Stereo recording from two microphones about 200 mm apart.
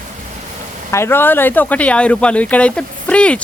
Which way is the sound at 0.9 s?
10° left (ahead or behind).